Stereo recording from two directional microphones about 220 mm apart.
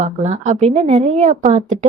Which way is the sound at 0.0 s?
30° right (ahead or behind).